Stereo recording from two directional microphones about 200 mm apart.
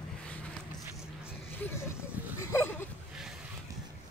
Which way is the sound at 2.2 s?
10° right (ahead or behind).